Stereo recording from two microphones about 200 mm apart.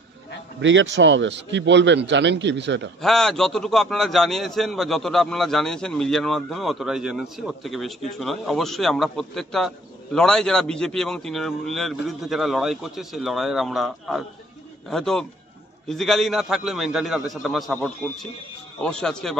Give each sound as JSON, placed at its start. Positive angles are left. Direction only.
{"t": 0.6, "sound": "a man's voice", "side_deg": -65}
{"t": 3.0, "sound": "a man's voice", "side_deg": 0}